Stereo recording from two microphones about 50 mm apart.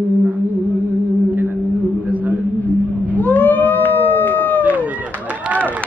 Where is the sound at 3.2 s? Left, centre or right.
Left.